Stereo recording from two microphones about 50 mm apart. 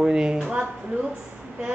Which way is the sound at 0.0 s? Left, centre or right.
Centre.